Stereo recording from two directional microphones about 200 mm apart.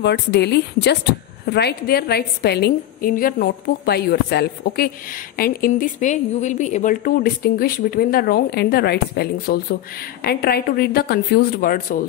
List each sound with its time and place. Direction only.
0.0 s speech: 55° left (ahead or behind)